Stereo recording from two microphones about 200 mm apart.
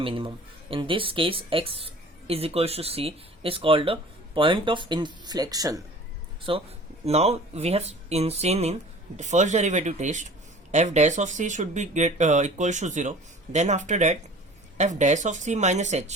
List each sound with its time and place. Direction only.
0.0 s speech: 25° right (ahead or behind)